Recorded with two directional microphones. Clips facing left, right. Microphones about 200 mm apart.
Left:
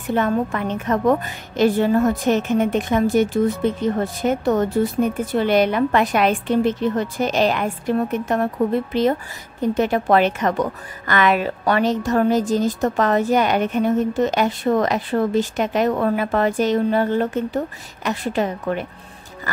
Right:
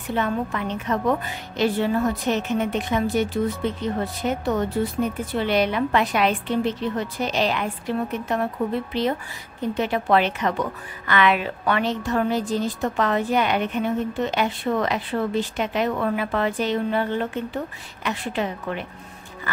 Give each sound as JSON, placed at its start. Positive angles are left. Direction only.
{"t": 0.1, "sound": "a woman's voice", "side_deg": 50}